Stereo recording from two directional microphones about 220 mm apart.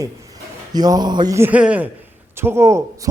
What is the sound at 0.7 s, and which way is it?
A man's voice, 20° right (ahead or behind).